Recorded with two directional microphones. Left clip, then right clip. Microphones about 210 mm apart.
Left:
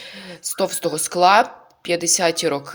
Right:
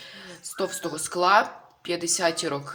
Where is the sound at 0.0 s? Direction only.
30° left (ahead or behind).